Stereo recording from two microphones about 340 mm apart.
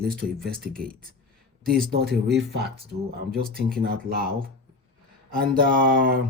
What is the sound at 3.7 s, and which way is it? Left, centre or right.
Speech, right.